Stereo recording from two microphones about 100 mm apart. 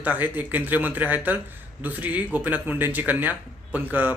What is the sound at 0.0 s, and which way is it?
Speech, 15° right (ahead or behind).